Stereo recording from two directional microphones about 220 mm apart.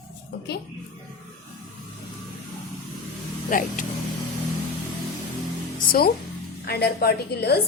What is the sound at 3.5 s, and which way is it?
Speech, 35° left (ahead or behind).